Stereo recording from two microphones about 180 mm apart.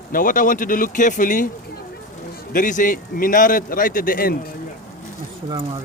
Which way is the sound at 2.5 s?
50° left (ahead or behind).